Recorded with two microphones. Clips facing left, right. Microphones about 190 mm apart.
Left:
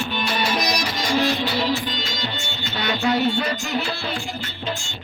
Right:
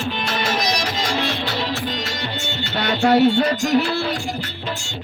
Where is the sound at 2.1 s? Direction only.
65° right (ahead or behind).